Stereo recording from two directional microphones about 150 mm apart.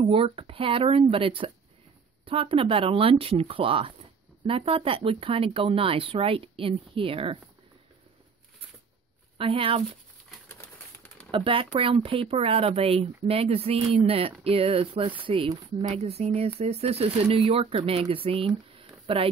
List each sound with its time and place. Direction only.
0.0 s speech: 35° right (ahead or behind)
9.4 s speech: 40° right (ahead or behind)
11.3 s speech: 35° right (ahead or behind)
18.8 s a sound: 40° right (ahead or behind)